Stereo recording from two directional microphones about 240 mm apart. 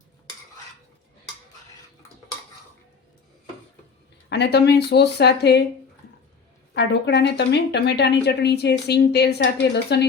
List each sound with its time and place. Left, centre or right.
4.3 s a woman's voice: left
6.7 s a woman's voice: left